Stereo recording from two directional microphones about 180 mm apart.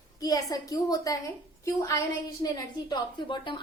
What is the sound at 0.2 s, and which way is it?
A woman's voice, 20° left (ahead or behind).